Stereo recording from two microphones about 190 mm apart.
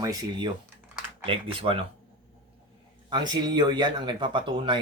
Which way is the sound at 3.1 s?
25° right (ahead or behind).